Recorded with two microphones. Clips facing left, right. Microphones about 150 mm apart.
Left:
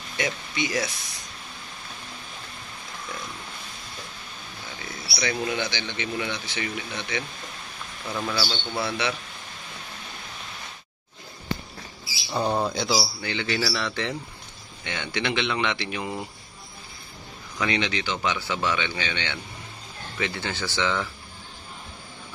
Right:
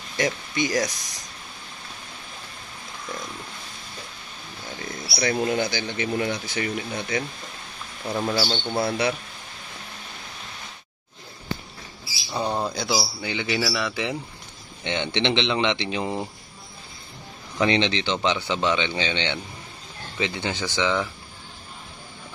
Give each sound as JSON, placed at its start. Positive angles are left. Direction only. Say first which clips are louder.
{"t": 0.2, "sound": "speech", "louder": "right 4 dB", "side_deg": -40}
{"t": 5.1, "sound": "speech", "louder": "right 4 dB", "side_deg": -40}
{"t": 12.3, "sound": "speech", "louder": "left 1 dB", "side_deg": 0}
{"t": 13.0, "sound": "speech", "louder": "right 1 dB", "side_deg": -15}
{"t": 14.8, "sound": "speech", "louder": "right 5 dB", "side_deg": -25}
{"t": 17.6, "sound": "speech", "louder": "right 5 dB", "side_deg": -25}